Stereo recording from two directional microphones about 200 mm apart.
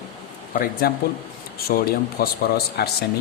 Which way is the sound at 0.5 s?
45° left (ahead or behind).